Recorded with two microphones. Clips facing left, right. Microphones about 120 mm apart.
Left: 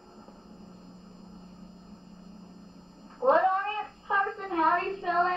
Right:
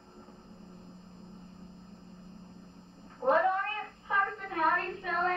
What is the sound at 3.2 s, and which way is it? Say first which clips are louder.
Cat: left 4 dB; 25° left (ahead or behind).